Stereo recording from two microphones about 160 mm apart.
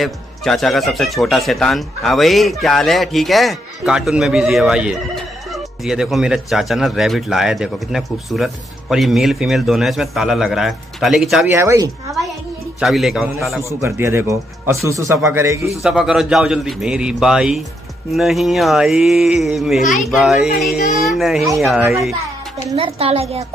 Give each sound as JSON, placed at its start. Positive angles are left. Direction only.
{"t": 0.0, "sound": "speech", "side_deg": 0}
{"t": 11.4, "sound": "speech", "side_deg": -20}
{"t": 12.8, "sound": "speech", "side_deg": 0}
{"t": 13.7, "sound": "speech", "side_deg": -15}
{"t": 15.6, "sound": "speech", "side_deg": 0}
{"t": 22.8, "sound": "a woman's voice", "side_deg": -35}